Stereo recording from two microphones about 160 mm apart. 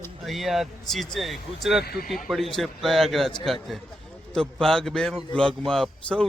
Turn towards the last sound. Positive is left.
turn(degrees=5)  # may be behind; listen again after turning